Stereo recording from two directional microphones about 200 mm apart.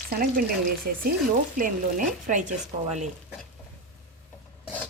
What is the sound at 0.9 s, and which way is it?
Speech, 50° right (ahead or behind).